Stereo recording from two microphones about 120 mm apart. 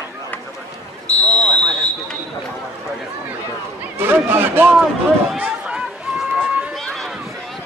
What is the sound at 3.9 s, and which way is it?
Speech, 20° right (ahead or behind).